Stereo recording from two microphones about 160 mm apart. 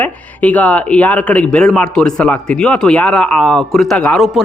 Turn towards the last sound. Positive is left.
turn(degrees=0)  # may be behind; listen again after turning